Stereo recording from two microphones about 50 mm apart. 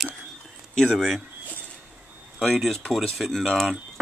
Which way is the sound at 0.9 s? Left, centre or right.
Centre.